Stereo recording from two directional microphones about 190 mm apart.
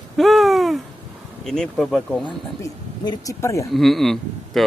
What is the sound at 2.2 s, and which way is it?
Speech, 20° left (ahead or behind).